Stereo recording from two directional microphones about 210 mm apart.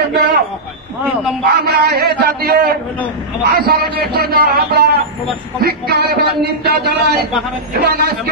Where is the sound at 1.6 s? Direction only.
50° right (ahead or behind).